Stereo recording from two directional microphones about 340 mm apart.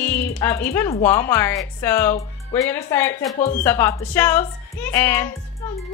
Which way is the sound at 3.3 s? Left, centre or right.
Left.